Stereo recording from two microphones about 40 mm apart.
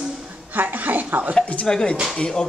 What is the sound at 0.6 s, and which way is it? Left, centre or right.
Speech, right.